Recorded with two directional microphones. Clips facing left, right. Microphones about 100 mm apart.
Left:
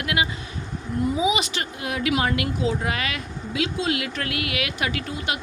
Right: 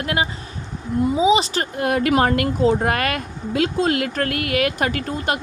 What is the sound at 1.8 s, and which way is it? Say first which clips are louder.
Speech: right 7 dB; 50° right (ahead or behind).